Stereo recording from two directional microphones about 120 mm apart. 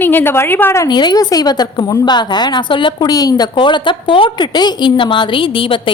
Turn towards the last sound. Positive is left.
turn(degrees=45)  # may be behind; listen again after turning